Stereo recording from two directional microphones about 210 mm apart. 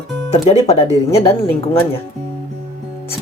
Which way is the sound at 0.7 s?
30° left (ahead or behind).